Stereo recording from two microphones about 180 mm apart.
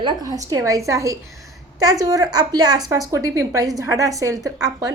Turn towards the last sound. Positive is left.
turn(degrees=-20)  # may be behind; listen again after turning